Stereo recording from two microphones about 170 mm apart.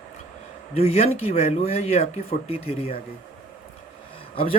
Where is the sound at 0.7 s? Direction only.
40° left (ahead or behind).